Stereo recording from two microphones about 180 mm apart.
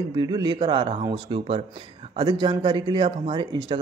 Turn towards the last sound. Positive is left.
turn(degrees=-25)  # may be behind; listen again after turning